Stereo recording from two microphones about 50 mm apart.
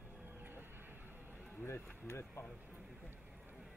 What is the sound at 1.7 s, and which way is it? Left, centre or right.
Speech, left.